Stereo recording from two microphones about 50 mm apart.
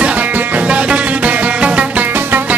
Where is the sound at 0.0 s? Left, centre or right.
Right.